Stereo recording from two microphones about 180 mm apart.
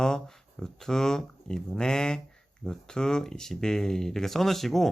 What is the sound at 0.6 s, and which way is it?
Speech, 5° left (ahead or behind).